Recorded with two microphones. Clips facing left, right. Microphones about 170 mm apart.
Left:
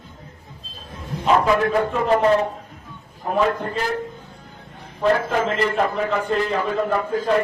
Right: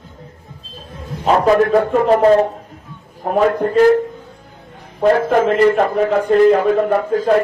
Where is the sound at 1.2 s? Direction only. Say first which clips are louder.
Right 5 dB; 40° right (ahead or behind).